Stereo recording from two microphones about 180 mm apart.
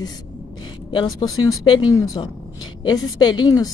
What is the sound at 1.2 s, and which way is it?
A woman's voice, 25° left (ahead or behind).